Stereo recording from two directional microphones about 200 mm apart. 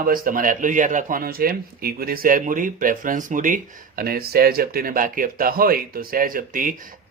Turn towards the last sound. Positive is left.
turn(degrees=-40)  # may be behind; listen again after turning